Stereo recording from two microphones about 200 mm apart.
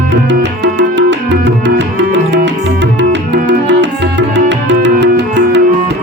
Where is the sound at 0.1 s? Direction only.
60° right (ahead or behind).